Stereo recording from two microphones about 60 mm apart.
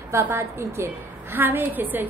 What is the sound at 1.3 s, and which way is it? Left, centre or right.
Speech, right.